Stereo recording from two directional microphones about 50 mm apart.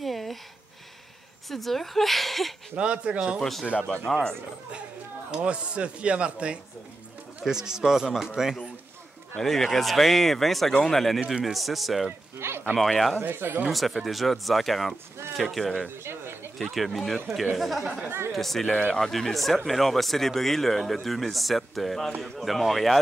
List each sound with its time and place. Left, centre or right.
0.0 s a sound: centre
1.5 s speech: centre
2.7 s speech: right
3.3 s speech: centre
5.3 s speech: centre
9.4 s speech: centre
12.4 s speech: right
12.7 s speech: centre
13.2 s speech: right
13.7 s speech: centre
16.0 s a sound: right
16.5 s speech: centre
18.7 s speech: left
18.9 s speech: centre